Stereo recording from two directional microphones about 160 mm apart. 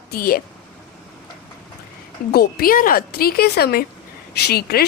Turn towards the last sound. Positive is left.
turn(degrees=75)  # may be behind; listen again after turning